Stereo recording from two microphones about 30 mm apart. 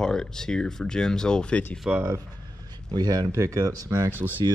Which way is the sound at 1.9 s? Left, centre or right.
Right.